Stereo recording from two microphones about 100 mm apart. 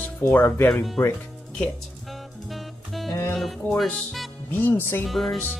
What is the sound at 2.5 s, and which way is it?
Music, centre (ahead or behind).